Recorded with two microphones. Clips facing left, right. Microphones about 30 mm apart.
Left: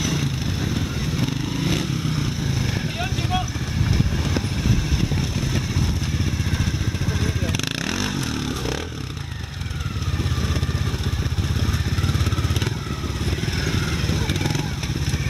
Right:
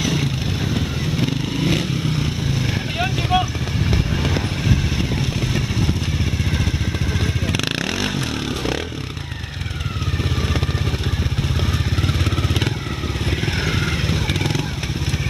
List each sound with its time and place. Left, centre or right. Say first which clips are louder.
0.0 s vehicle: right 3 dB; right
7.1 s vehicle: right 1 dB; centre
13.7 s vehicle: right 3 dB; right